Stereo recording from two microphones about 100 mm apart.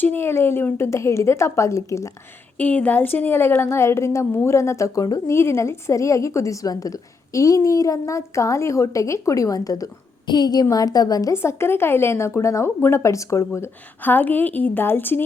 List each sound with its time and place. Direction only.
0.0 s a woman's voice: 20° left (ahead or behind)
2.6 s a woman's voice: 15° left (ahead or behind)